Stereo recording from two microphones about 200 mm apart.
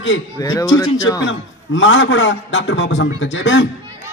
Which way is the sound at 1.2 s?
70° left (ahead or behind).